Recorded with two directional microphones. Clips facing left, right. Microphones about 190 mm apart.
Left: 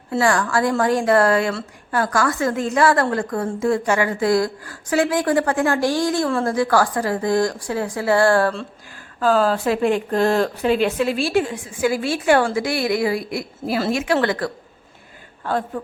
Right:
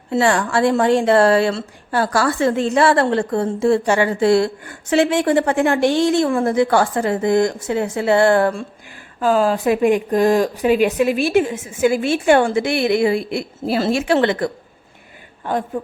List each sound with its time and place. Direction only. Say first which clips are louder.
0.1 s a woman's voice: right 2 dB; 25° right (ahead or behind)